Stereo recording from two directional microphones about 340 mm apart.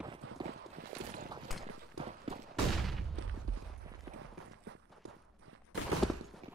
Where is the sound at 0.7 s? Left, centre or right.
Right.